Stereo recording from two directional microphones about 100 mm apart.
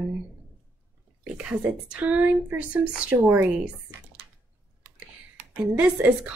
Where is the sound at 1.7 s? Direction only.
15° right (ahead or behind).